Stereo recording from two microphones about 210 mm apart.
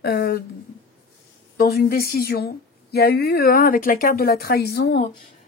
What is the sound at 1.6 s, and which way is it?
A woman's voice, 45° left (ahead or behind).